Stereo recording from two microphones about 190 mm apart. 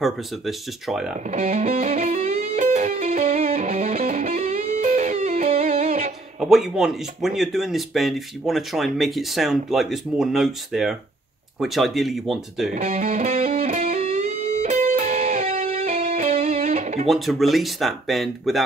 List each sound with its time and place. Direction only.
0.0 s speech: centre (ahead or behind)
1.3 s music: 40° right (ahead or behind)
6.4 s speech: 5° right (ahead or behind)
12.7 s music: 40° right (ahead or behind)
17.1 s speech: centre (ahead or behind)